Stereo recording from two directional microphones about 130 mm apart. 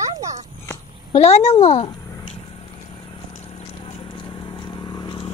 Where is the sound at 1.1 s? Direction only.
55° left (ahead or behind).